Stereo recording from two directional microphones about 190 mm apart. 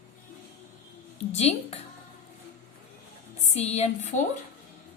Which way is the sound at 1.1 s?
35° left (ahead or behind).